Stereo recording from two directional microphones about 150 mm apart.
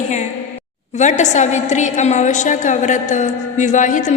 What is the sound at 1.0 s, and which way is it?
A woman's voice, 50° left (ahead or behind).